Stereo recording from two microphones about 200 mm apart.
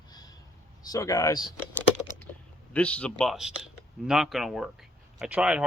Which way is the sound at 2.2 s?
5° left (ahead or behind).